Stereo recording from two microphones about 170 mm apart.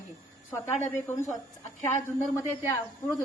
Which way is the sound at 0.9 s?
10° left (ahead or behind).